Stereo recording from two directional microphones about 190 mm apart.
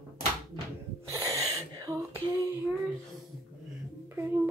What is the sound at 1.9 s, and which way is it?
Female singing, 15° right (ahead or behind).